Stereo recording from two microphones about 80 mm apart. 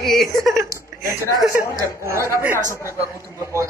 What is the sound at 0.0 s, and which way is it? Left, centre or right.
Speech, centre.